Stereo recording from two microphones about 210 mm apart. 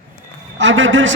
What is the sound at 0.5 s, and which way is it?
Speech, 65° right (ahead or behind).